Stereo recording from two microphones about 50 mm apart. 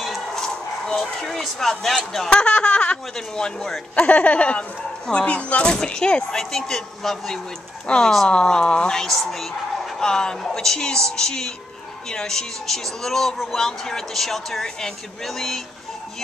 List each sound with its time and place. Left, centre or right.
0.0 s speech: centre
2.3 s speech: left
3.9 s speech: left
5.7 s speech: centre
7.8 s speech: centre